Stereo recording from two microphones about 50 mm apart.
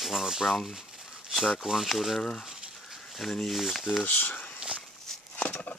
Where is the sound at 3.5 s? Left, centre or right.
Centre.